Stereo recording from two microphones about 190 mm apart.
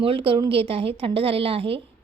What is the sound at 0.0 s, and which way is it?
Speech, 30° right (ahead or behind).